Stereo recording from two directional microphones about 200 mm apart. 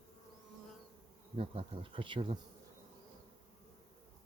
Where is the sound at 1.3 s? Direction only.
25° right (ahead or behind).